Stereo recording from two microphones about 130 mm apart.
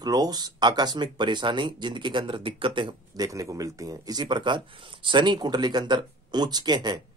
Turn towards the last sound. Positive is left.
turn(degrees=-35)  # may be behind; listen again after turning